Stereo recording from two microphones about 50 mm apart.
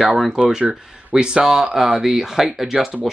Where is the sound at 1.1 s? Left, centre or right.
Centre.